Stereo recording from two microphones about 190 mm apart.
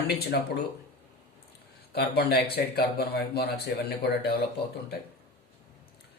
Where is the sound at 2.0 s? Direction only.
55° left (ahead or behind).